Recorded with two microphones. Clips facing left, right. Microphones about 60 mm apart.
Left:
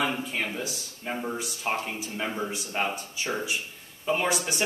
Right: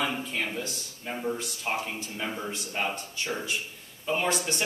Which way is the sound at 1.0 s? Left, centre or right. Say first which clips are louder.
Even; centre.